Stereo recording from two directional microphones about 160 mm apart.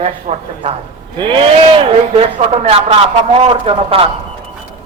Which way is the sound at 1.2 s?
30° right (ahead or behind).